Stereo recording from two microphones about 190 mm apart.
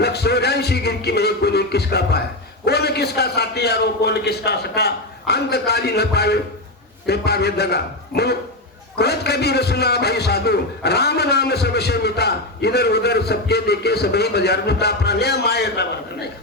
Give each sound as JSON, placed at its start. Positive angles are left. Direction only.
{"t": 0.0, "sound": "a man's voice", "side_deg": 60}